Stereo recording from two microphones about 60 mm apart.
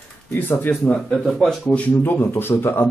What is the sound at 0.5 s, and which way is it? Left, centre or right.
Speech, left.